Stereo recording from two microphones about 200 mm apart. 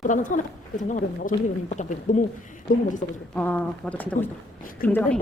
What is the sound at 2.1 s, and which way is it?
Speech, 40° left (ahead or behind).